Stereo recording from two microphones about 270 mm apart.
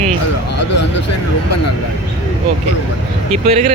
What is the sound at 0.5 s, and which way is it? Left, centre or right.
Speech, left.